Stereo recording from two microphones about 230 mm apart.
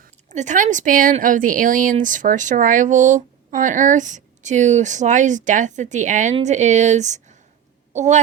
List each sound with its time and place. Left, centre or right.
0.0 s speech: right